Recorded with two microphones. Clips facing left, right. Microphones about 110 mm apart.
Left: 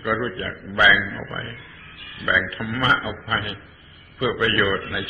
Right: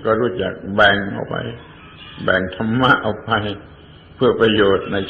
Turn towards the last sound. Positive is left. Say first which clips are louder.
# right 8 dB
turn(degrees=-30)  # may be behind; listen again after turning